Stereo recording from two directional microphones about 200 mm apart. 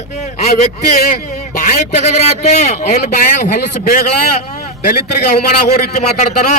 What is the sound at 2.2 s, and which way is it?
A man's voice, 35° left (ahead or behind).